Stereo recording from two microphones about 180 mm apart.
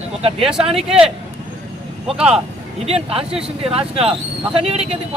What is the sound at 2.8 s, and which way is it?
Speech, 35° right (ahead or behind).